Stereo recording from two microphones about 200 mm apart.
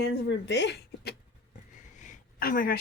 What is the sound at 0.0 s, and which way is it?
Speech, 65° left (ahead or behind).